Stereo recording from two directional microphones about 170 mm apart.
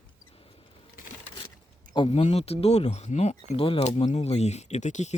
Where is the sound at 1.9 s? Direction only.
30° left (ahead or behind).